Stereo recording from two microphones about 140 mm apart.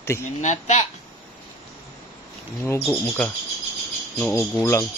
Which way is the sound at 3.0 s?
10° left (ahead or behind).